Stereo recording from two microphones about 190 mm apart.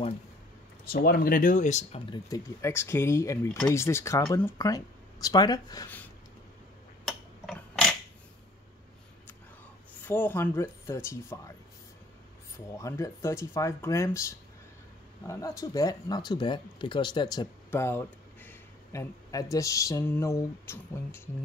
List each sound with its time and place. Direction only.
0.8 s speech: 55° left (ahead or behind); by 2.1 s 35° left (ahead or behind)
2.2 s speech: 15° left (ahead or behind)
7.1 s a sound: 5° left (ahead or behind)
10.0 s speech: 10° left (ahead or behind)
12.5 s speech: 15° left (ahead or behind)